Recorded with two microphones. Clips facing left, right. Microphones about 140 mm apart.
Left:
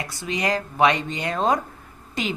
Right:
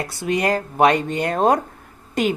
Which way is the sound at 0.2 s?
55° right (ahead or behind).